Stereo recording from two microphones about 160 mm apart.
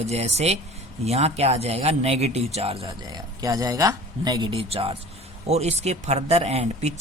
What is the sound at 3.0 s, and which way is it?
Speech, 25° right (ahead or behind).